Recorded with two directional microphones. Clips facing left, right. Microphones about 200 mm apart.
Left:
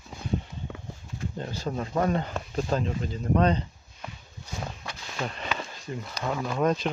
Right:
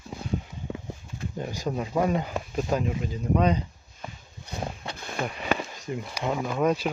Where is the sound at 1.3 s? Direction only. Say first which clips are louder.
Right 2 dB; 15° right (ahead or behind).